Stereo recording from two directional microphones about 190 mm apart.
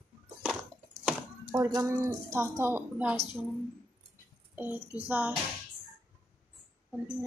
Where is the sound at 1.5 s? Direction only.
15° right (ahead or behind).